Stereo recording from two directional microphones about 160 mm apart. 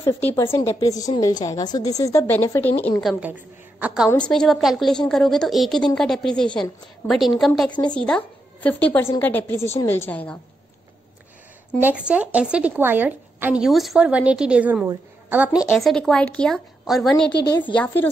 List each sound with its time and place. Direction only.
0.4 s a woman's voice: 15° left (ahead or behind)
3.0 s a woman's voice: centre (ahead or behind)
11.8 s a woman's voice: 5° right (ahead or behind)
15.6 s a woman's voice: centre (ahead or behind)
17.3 s a woman's voice: 90° left
17.7 s a woman's voice: 10° left (ahead or behind)